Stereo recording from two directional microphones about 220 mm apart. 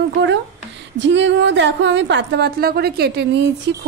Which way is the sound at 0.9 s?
55° right (ahead or behind).